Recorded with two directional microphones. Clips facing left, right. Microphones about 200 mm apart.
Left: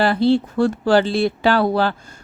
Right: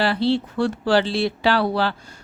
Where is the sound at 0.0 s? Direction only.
45° left (ahead or behind).